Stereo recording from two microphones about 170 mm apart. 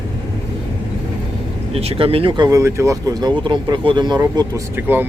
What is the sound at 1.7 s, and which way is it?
Speech, 35° right (ahead or behind).